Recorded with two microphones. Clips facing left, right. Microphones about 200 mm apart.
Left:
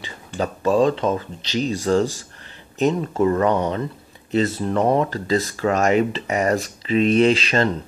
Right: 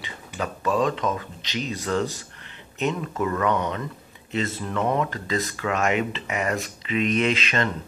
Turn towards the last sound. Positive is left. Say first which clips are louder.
# left 7 dB
turn(degrees=35)  # may be behind; listen again after turning